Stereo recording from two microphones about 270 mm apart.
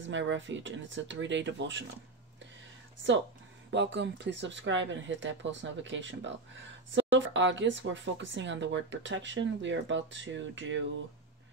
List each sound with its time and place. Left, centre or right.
0.0 s speech: right
3.7 s speech: right